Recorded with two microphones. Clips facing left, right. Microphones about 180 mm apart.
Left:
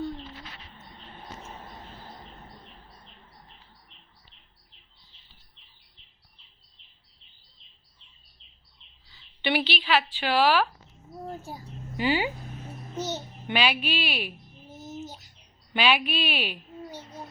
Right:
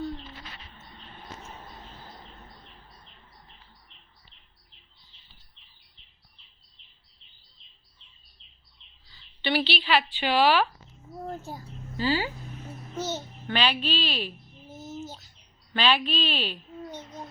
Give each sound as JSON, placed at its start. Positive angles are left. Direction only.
{"t": 9.5, "sound": "a woman's voice", "side_deg": 10}
{"t": 13.0, "sound": "babbling", "side_deg": 15}
{"t": 15.7, "sound": "a sound", "side_deg": 10}